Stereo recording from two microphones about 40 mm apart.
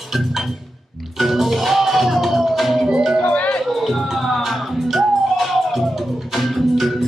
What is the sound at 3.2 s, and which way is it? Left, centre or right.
Music, left.